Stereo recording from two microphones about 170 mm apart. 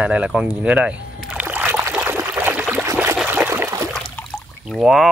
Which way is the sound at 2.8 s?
15° right (ahead or behind).